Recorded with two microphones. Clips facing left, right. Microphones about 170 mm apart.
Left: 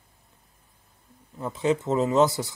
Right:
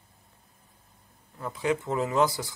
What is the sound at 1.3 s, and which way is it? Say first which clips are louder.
Speech: left 3 dB; 25° left (ahead or behind).